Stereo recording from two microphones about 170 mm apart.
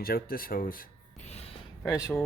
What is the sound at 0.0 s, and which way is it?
Speech, 60° left (ahead or behind).